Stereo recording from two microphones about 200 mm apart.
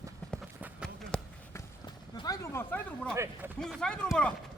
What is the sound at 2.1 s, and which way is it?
Speech, 20° left (ahead or behind).